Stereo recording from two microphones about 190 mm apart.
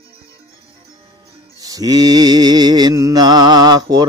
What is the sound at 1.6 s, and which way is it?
Mantra, 20° right (ahead or behind).